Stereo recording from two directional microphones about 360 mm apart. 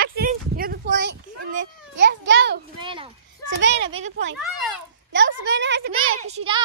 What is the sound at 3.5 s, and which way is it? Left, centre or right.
Speech, right.